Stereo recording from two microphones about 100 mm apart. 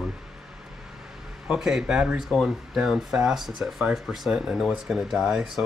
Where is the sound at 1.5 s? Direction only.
5° right (ahead or behind).